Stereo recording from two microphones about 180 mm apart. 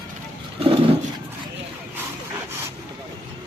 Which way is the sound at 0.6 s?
30° right (ahead or behind).